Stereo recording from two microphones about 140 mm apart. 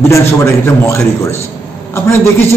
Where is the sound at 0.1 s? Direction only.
20° left (ahead or behind).